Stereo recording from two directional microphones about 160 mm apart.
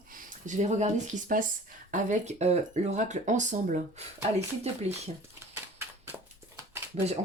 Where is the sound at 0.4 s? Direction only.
45° right (ahead or behind).